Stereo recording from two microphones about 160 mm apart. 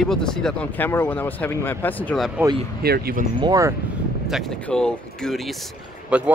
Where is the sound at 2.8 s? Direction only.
75° right (ahead or behind).